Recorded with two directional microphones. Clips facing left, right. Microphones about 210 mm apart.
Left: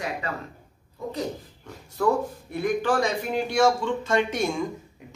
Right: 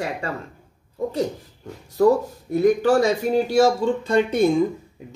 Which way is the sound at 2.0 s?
40° right (ahead or behind).